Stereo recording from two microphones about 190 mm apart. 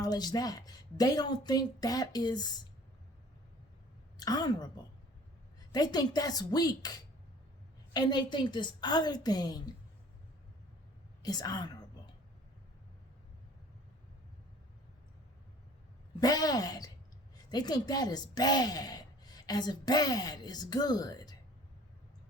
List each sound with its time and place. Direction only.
0.0 s a woman's voice: 20° left (ahead or behind)
4.2 s a woman's voice: 20° left (ahead or behind)
5.7 s a woman's voice: 20° left (ahead or behind)
11.2 s a woman's voice: 20° left (ahead or behind)
16.2 s a woman's voice: 20° left (ahead or behind)